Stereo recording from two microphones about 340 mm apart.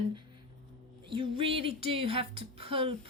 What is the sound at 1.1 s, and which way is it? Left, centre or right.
A woman's voice, centre.